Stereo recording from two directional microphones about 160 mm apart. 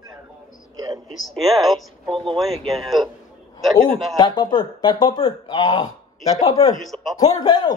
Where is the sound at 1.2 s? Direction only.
Centre (ahead or behind).